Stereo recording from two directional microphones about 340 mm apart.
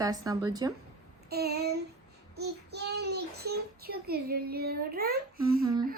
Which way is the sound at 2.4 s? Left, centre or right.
Right.